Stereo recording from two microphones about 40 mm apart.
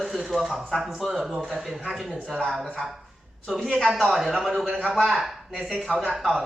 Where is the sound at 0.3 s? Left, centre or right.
Centre.